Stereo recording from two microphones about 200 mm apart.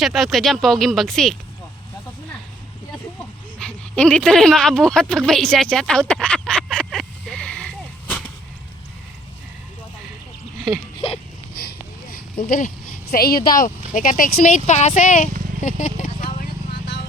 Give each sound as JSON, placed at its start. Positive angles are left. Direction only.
{"t": 0.0, "sound": "speech", "side_deg": 0}
{"t": 3.6, "sound": "speech", "side_deg": 5}
{"t": 11.5, "sound": "a sound", "side_deg": 50}
{"t": 12.5, "sound": "speech", "side_deg": 45}
{"t": 16.2, "sound": "vehicle", "side_deg": 55}